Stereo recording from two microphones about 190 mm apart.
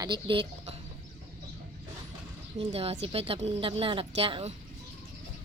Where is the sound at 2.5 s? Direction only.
30° right (ahead or behind).